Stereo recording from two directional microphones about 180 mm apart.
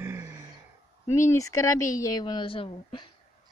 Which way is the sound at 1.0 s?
15° left (ahead or behind).